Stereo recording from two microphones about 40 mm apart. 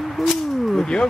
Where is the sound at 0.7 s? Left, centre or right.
Centre.